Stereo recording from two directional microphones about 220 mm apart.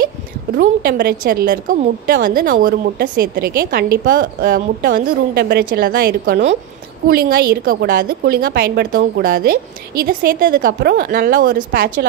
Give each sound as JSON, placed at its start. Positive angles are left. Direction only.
{"t": 0.6, "sound": "a woman's voice", "side_deg": -45}